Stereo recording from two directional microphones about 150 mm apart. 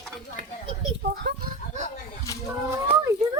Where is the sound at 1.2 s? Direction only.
70° right (ahead or behind).